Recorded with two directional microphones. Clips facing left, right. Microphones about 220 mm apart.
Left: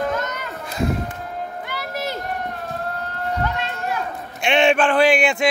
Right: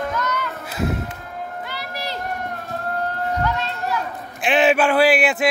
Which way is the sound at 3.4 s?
50° left (ahead or behind).